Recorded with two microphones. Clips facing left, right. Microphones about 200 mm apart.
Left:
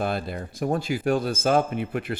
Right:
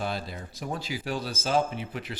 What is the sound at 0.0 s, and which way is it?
Speech, 55° left (ahead or behind).